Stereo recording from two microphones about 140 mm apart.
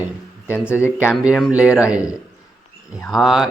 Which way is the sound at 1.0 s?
5° right (ahead or behind).